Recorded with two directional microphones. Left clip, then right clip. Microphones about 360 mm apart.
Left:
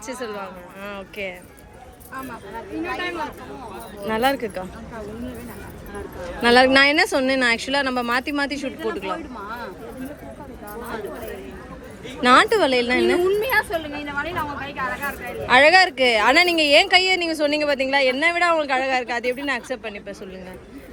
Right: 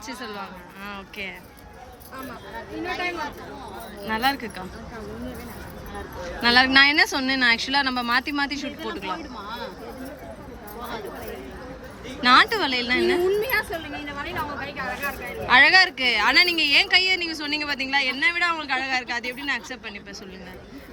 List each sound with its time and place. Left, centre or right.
0.1 s a woman's voice: centre
4.0 s a woman's voice: centre
6.2 s a woman's voice: centre
12.2 s a woman's voice: centre
13.4 s speech: centre
15.4 s a woman's voice: centre